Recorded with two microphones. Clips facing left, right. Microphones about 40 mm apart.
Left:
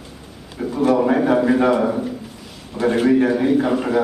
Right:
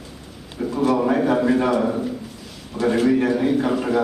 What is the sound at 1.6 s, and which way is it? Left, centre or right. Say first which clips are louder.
A man's voice: left 3 dB; centre.